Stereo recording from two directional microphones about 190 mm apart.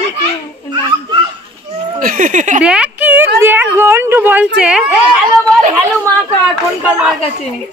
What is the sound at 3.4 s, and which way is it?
Speech, 10° right (ahead or behind).